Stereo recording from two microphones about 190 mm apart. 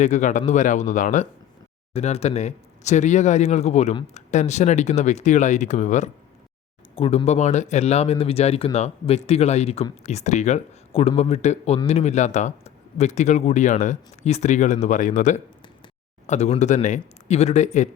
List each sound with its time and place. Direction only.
0.0 s speech: 40° left (ahead or behind)